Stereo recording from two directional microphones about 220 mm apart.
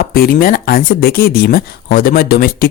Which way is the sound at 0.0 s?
40° left (ahead or behind).